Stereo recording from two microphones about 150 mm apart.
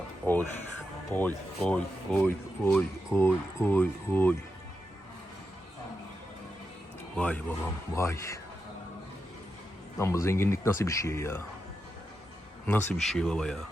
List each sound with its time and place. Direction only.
0.2 s speech: 15° left (ahead or behind)
7.2 s speech: 10° left (ahead or behind)
10.0 s speech: 20° left (ahead or behind)
12.6 s speech: 10° left (ahead or behind)